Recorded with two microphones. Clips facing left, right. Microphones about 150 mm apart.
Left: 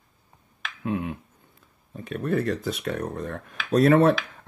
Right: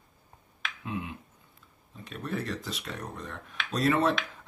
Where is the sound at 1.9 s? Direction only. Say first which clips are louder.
Left 9 dB; 55° left (ahead or behind).